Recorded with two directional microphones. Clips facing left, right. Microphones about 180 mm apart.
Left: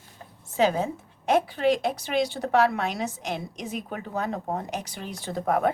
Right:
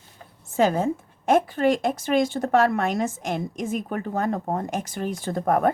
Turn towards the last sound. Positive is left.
turn(degrees=-45)  # may be behind; listen again after turning